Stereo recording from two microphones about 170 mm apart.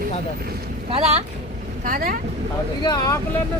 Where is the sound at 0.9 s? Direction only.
35° right (ahead or behind).